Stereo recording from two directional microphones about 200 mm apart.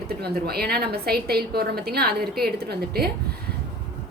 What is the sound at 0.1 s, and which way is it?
A woman's voice, 50° right (ahead or behind).